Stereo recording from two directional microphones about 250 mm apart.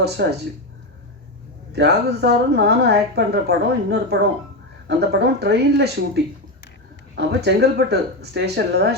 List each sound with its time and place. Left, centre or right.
0.0 s a woman's voice: right
1.7 s a woman's voice: right